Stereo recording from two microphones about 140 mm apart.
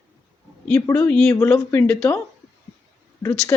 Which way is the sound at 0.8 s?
20° left (ahead or behind).